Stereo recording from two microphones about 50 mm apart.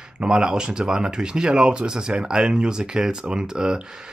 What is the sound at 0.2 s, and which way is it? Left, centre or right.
Speech, centre.